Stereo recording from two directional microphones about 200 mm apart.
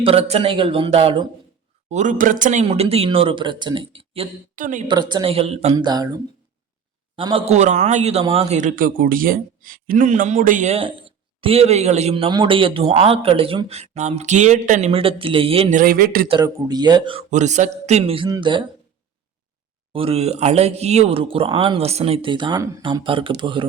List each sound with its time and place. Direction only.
0.0 s a man's voice: 30° right (ahead or behind)
1.9 s a man's voice: 40° right (ahead or behind)
4.5 s a man's voice: 40° right (ahead or behind)
4.9 s a man's voice: 20° right (ahead or behind)
7.2 s a man's voice: 25° right (ahead or behind)
15.8 s speech: 45° right (ahead or behind)
16.3 s a man's voice: 20° right (ahead or behind)
19.9 s a man's voice: 30° right (ahead or behind)